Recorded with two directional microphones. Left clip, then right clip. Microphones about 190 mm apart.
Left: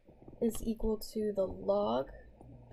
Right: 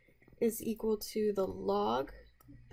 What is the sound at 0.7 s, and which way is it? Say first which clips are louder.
Speech: right 2 dB; 45° right (ahead or behind).